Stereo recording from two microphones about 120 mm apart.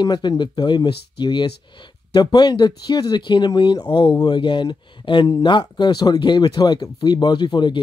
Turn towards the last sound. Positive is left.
turn(degrees=40)  # may be behind; listen again after turning